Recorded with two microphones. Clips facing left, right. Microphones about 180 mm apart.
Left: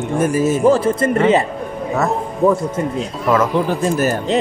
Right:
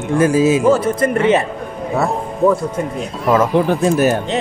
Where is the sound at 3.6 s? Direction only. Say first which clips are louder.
Right 3 dB; 60° right (ahead or behind).